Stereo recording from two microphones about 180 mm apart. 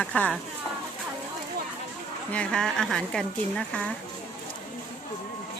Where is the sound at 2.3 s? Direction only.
5° left (ahead or behind).